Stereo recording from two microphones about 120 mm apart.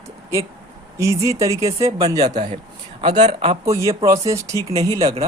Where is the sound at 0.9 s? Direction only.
25° right (ahead or behind).